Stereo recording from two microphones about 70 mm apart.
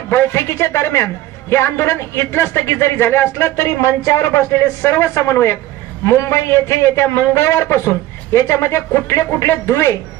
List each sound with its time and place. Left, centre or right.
0.1 s a man's voice: left
3.4 s a man's voice: left